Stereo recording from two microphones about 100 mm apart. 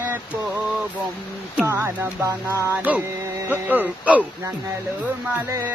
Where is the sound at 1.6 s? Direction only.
25° right (ahead or behind).